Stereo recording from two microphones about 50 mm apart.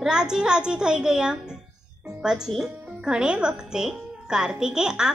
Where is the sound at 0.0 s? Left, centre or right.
Centre.